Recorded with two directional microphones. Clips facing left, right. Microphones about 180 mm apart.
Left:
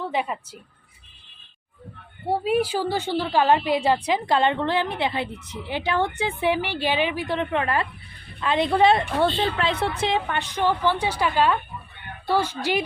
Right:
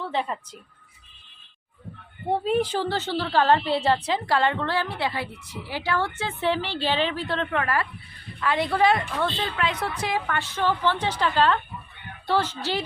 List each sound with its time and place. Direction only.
0.0 s a woman's voice: 10° left (ahead or behind)
2.2 s a woman's voice: 10° left (ahead or behind)